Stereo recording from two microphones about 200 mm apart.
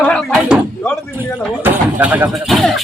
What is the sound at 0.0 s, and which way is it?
Door, 5° left (ahead or behind).